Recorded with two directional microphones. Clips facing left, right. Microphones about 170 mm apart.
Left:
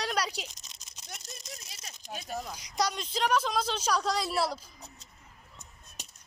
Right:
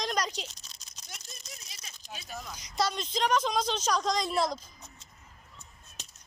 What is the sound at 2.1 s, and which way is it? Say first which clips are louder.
Speech: left 5 dB; 40° left (ahead or behind).